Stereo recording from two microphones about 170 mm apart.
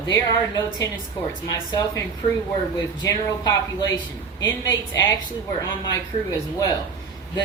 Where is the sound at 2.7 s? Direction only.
25° left (ahead or behind).